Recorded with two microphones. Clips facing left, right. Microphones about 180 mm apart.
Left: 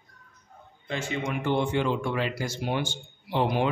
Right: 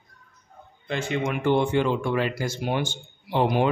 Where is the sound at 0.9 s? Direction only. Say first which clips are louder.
Right 4 dB; 60° right (ahead or behind).